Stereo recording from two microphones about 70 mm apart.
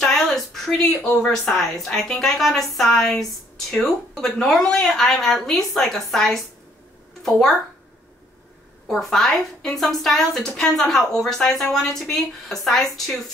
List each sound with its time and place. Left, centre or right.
0.0 s speech: centre
8.8 s speech: centre